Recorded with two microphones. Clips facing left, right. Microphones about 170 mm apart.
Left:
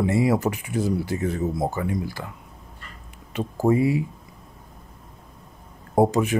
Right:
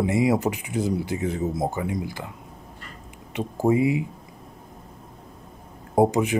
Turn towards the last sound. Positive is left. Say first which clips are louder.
# even
turn(degrees=-15)  # may be behind; listen again after turning